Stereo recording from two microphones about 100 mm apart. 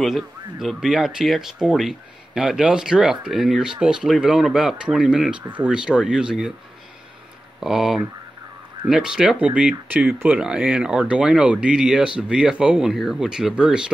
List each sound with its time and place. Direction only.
0.0 s speech: centre (ahead or behind)
7.6 s speech: 5° right (ahead or behind)